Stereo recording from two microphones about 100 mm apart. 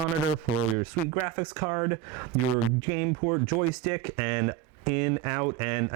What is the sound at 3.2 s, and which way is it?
Speech, 35° right (ahead or behind).